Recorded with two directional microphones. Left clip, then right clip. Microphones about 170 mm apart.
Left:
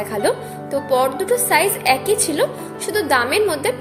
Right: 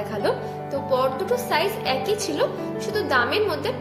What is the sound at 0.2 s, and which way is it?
A woman's voice, 25° left (ahead or behind).